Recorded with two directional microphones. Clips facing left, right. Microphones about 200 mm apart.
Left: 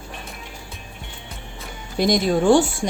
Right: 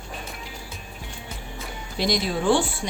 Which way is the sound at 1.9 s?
50° left (ahead or behind).